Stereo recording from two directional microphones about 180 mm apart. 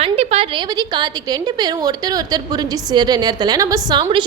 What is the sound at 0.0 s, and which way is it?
A woman's voice, 35° right (ahead or behind).